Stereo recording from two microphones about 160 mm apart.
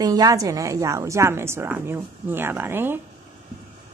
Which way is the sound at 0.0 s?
25° right (ahead or behind).